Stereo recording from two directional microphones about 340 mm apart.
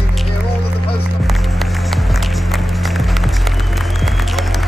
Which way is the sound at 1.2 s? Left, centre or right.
Centre.